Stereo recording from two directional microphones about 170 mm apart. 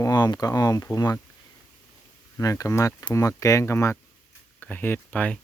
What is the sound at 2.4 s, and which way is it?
Speech, 20° left (ahead or behind).